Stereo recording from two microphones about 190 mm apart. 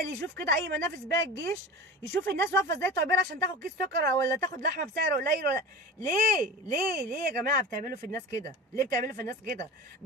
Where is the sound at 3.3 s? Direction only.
55° right (ahead or behind).